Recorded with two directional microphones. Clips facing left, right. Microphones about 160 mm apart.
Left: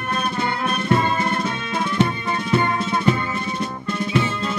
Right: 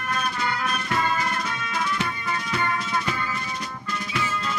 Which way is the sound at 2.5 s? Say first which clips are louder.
Left 7 dB; 25° left (ahead or behind).